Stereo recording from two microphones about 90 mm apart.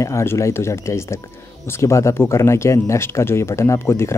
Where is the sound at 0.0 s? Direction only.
30° left (ahead or behind).